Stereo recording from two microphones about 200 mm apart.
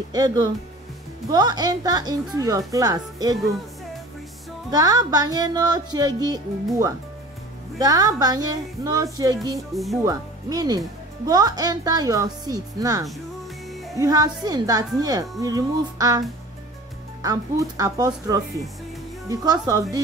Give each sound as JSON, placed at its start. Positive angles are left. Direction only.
{"t": 0.1, "sound": "speech", "side_deg": -20}
{"t": 4.6, "sound": "speech", "side_deg": -20}